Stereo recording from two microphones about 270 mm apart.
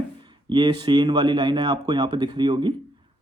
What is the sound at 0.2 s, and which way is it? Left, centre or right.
Speech, centre.